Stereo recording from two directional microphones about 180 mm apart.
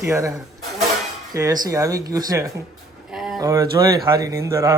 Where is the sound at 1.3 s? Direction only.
20° right (ahead or behind).